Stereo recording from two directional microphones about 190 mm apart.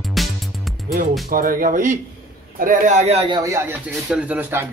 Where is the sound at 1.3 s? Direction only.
45° right (ahead or behind).